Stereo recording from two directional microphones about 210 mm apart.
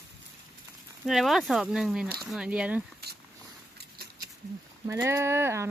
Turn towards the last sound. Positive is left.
turn(degrees=-10)  # may be behind; listen again after turning